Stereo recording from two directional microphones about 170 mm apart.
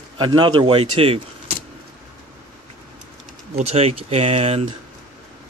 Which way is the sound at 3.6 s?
40° right (ahead or behind).